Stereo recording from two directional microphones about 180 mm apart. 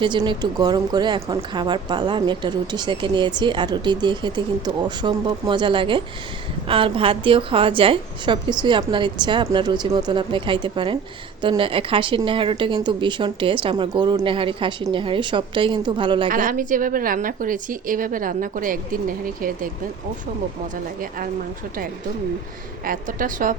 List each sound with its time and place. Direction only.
0.0 s speech: 25° right (ahead or behind)
16.3 s a woman's voice: 50° right (ahead or behind)
22.8 s a woman's voice: 50° right (ahead or behind)